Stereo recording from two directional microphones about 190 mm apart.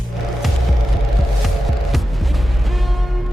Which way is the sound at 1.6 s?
Centre (ahead or behind).